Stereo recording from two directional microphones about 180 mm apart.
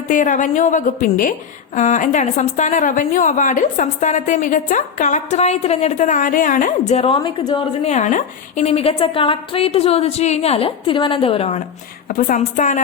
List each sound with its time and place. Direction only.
0.1 s a woman's voice: 45° left (ahead or behind); by 7.7 s 25° left (ahead or behind)
7.9 s a woman's voice: 40° left (ahead or behind)
12.0 s a woman's voice: 45° left (ahead or behind)